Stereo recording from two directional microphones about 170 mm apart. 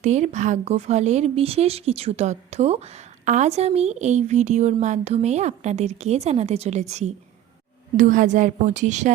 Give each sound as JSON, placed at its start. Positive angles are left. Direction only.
{"t": 0.0, "sound": "a woman's voice", "side_deg": -45}